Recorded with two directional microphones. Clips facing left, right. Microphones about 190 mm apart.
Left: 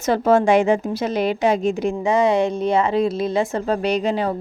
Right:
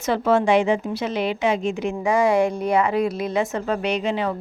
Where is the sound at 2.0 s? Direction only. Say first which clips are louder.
Even; 20° left (ahead or behind); by 4.3 s 40° left (ahead or behind).